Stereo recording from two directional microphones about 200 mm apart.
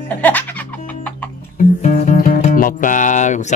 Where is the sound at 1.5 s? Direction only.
35° left (ahead or behind).